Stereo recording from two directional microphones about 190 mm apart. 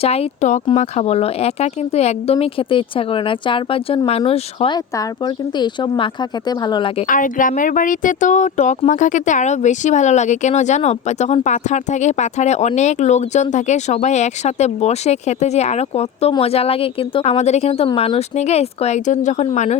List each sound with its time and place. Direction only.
0.0 s speech: 30° left (ahead or behind)
7.1 s speech: 45° left (ahead or behind)